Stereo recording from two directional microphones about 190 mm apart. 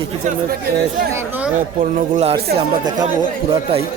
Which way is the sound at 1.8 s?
40° right (ahead or behind).